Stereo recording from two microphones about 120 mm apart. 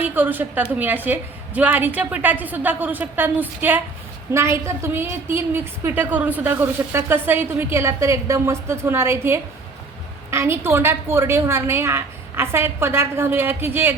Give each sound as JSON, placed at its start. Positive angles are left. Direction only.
{"t": 0.0, "sound": "a woman's voice", "side_deg": -15}